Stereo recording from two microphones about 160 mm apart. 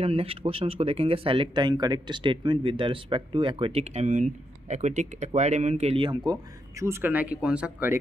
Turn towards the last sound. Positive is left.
turn(degrees=-10)  # may be behind; listen again after turning